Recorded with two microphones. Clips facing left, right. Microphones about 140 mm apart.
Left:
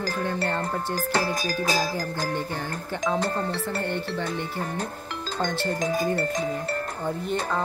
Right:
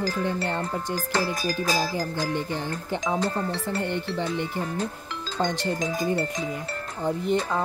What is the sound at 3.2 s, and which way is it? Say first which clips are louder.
Speech: even; 55° left (ahead or behind).